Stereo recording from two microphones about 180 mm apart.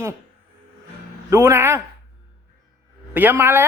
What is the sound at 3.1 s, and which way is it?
Speech, 10° right (ahead or behind).